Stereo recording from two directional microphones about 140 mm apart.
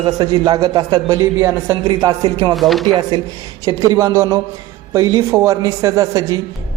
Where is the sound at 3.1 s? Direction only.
35° right (ahead or behind).